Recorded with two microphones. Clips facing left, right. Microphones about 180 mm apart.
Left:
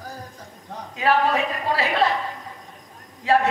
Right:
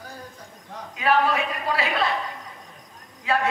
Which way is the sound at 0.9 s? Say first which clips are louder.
Left 1 dB; 35° left (ahead or behind).